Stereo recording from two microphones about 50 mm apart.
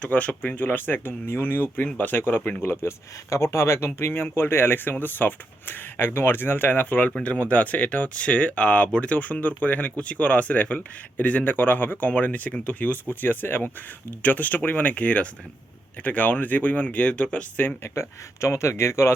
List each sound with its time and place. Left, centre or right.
0.0 s a man's voice: left
2.6 s speech: left
7.2 s a man's voice: left
13.2 s a man's voice: left
17.8 s speech: left